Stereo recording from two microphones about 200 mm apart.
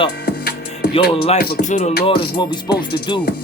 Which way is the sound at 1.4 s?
40° left (ahead or behind).